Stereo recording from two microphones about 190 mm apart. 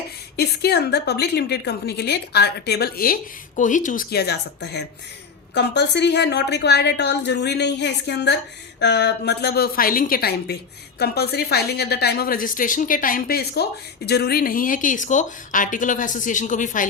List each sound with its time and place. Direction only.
0.3 s a woman's voice: 55° left (ahead or behind); by 16.8 s 40° left (ahead or behind)